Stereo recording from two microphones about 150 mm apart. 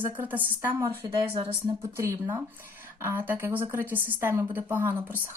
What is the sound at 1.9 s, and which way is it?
Speech, 15° right (ahead or behind).